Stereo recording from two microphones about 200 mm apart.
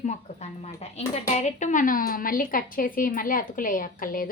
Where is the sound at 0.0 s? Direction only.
35° left (ahead or behind).